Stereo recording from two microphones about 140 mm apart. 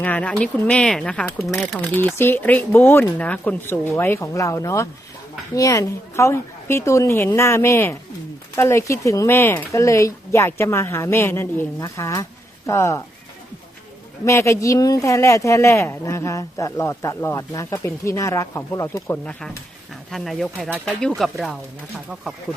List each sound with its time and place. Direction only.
0.0 s speech: 10° left (ahead or behind)
1.9 s speech: 15° left (ahead or behind)
14.3 s speech: 20° left (ahead or behind)
19.2 s speech: 10° left (ahead or behind)